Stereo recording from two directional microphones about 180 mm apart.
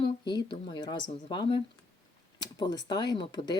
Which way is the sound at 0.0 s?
25° left (ahead or behind).